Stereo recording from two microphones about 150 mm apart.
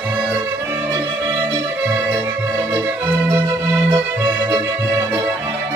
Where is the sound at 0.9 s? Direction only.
25° right (ahead or behind).